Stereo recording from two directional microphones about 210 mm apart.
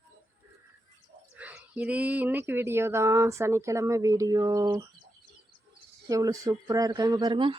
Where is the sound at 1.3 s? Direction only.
5° right (ahead or behind).